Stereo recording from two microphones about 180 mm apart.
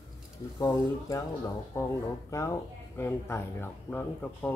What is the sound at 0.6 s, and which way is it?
Speech, 20° left (ahead or behind).